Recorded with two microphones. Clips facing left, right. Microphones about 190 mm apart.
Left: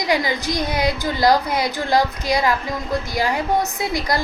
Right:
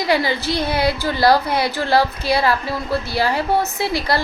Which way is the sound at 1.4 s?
30° right (ahead or behind).